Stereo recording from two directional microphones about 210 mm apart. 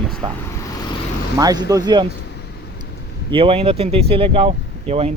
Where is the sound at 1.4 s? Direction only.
15° right (ahead or behind).